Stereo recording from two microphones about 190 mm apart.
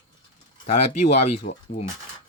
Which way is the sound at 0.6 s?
35° left (ahead or behind).